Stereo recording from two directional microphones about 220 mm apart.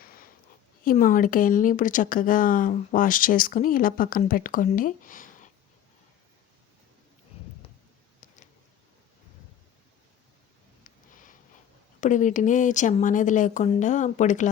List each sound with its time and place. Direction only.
0.9 s speech: 35° left (ahead or behind)
11.9 s speech: 35° left (ahead or behind)